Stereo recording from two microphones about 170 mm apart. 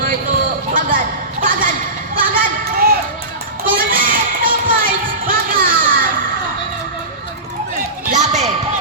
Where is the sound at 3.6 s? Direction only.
55° right (ahead or behind).